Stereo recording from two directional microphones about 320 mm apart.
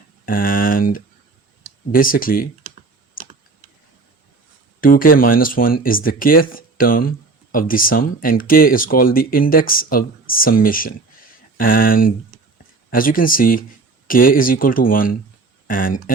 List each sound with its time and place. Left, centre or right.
0.3 s a sound: left
1.9 s speech: left
4.8 s speech: left